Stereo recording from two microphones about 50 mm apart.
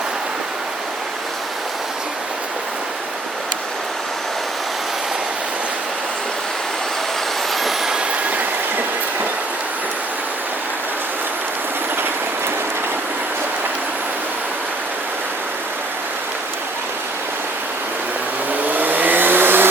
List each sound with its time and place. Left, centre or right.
7.5 s vehicle: centre
8.3 s train: right
18.7 s vehicle: right